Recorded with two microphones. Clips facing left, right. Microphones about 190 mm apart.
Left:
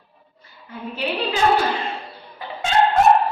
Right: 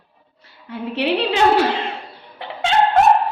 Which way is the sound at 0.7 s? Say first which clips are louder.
Right 5 dB; 75° right (ahead or behind).